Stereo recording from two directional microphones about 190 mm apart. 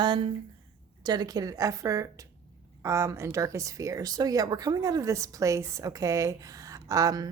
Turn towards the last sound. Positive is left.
turn(degrees=-15)  # may be behind; listen again after turning